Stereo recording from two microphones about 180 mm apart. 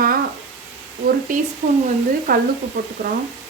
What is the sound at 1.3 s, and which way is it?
A woman's voice, 45° right (ahead or behind).